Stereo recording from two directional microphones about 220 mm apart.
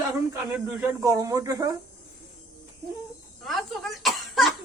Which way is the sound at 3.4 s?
Centre (ahead or behind).